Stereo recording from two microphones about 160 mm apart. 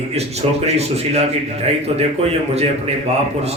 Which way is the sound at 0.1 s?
40° right (ahead or behind).